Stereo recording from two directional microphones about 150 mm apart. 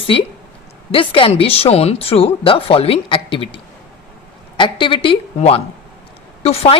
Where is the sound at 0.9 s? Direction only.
35° left (ahead or behind).